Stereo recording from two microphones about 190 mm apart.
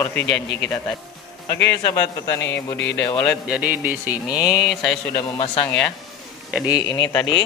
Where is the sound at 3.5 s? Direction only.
10° right (ahead or behind).